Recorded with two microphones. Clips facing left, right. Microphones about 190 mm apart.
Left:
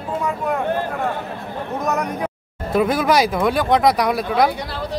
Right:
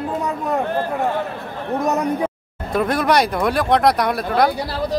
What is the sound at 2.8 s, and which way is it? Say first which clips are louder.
Speech: left 1 dB; centre (ahead or behind).